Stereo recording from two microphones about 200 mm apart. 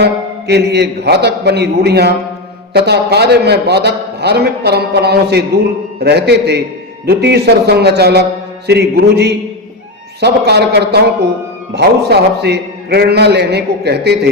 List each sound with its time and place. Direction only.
0.0 s a man's voice: 55° right (ahead or behind)